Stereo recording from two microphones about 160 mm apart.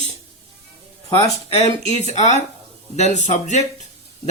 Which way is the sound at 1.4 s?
40° left (ahead or behind).